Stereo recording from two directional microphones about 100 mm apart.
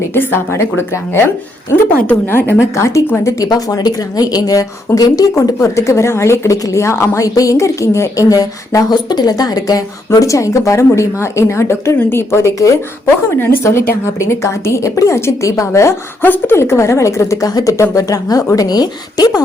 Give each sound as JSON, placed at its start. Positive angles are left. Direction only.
{"t": 0.1, "sound": "a woman's voice", "side_deg": 20}